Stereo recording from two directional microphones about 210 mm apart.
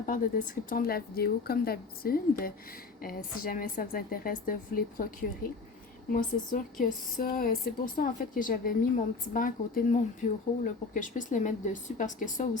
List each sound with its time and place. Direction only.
0.0 s a woman's voice: 40° left (ahead or behind)
6.1 s a woman's voice: 40° left (ahead or behind)